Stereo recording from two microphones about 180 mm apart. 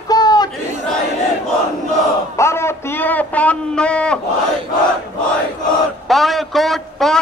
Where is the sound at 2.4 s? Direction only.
15° left (ahead or behind).